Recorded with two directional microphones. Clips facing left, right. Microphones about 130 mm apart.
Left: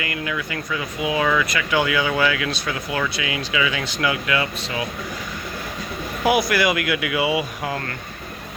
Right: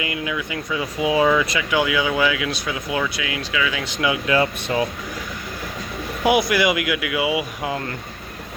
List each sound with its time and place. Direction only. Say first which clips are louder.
0.0 s speech: right 1 dB; 15° right (ahead or behind)
0.8 s speech: right 4 dB; 25° right (ahead or behind)
1.7 s speech: even; 5° right (ahead or behind)
3.8 s speech: right 1 dB; 20° right (ahead or behind)
4.3 s speech: right 4 dB; 30° right (ahead or behind)
6.2 s speech: right 1 dB; 20° right (ahead or behind); by 7.4 s 5° right (ahead or behind)
7.6 s speech: right 1 dB; 15° right (ahead or behind)